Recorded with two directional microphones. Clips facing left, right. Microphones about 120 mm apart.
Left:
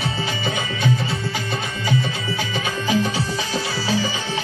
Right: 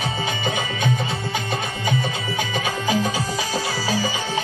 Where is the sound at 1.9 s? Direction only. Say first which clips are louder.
Left 2 dB; 15° right (ahead or behind).